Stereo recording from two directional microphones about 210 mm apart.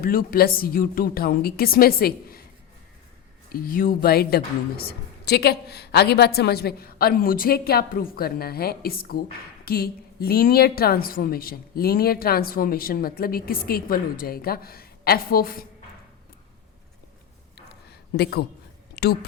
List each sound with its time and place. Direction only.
0.0 s a woman's voice: 45° left (ahead or behind)
3.5 s a woman's voice: 45° left (ahead or behind)
18.2 s a woman's voice: 50° left (ahead or behind)
19.0 s a sound: 50° left (ahead or behind)